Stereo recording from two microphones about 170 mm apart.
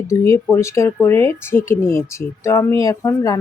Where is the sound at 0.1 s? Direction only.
15° left (ahead or behind).